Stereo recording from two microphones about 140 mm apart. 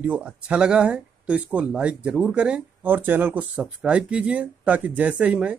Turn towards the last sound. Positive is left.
turn(degrees=-10)  # may be behind; listen again after turning